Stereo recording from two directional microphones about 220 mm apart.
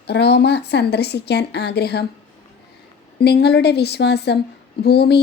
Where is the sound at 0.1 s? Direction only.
50° left (ahead or behind).